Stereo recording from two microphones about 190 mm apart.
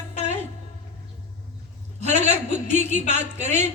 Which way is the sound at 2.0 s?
35° right (ahead or behind).